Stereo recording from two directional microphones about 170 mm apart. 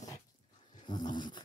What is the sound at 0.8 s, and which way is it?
Dog, 25° left (ahead or behind).